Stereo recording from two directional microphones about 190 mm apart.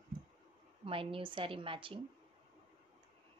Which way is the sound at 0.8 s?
30° right (ahead or behind).